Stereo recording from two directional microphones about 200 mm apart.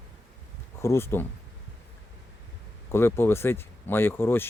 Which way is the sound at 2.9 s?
10° left (ahead or behind).